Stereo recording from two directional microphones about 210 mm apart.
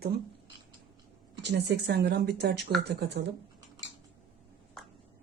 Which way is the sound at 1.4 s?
50° right (ahead or behind).